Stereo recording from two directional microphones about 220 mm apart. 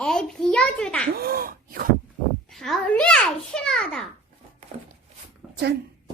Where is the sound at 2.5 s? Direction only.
Centre (ahead or behind).